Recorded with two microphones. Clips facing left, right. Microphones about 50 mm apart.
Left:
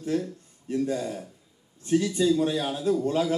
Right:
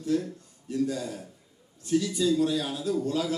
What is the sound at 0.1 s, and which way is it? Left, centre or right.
A man's voice, left.